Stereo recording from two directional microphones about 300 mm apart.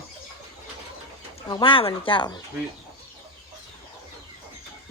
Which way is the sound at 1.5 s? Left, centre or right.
Centre.